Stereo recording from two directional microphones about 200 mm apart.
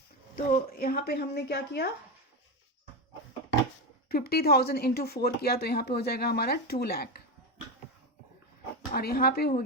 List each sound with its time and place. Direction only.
0.3 s speech: 45° left (ahead or behind)
4.1 s speech: 50° left (ahead or behind)
8.9 s speech: 50° left (ahead or behind)